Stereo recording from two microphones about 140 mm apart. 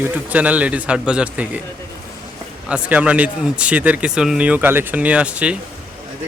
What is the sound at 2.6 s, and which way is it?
Speech, 10° right (ahead or behind).